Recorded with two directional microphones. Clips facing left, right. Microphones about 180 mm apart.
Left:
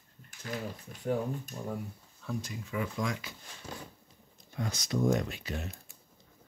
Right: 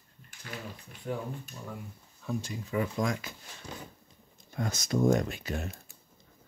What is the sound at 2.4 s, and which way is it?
Speech, 35° right (ahead or behind).